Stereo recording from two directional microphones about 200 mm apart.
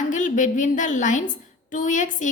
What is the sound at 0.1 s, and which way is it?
A woman's voice, 40° left (ahead or behind).